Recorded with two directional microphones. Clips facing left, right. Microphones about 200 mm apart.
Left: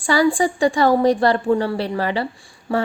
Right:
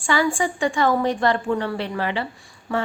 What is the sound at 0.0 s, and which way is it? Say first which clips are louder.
Speech: left 5 dB; 35° left (ahead or behind).